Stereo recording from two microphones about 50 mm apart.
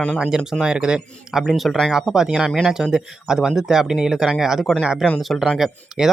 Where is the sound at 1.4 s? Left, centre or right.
Centre.